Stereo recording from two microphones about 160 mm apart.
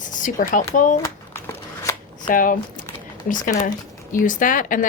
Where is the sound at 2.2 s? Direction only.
60° left (ahead or behind).